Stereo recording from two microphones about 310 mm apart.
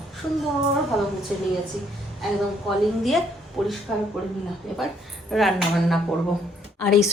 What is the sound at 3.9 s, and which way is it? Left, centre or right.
Speech, centre.